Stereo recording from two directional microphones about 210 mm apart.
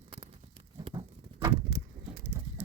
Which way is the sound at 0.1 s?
25° right (ahead or behind).